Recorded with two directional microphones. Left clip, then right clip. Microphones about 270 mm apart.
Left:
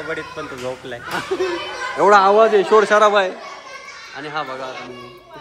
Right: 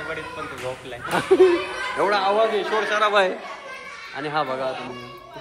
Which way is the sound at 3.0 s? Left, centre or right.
Centre.